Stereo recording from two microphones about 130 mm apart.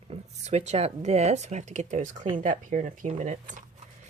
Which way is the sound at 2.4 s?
85° right.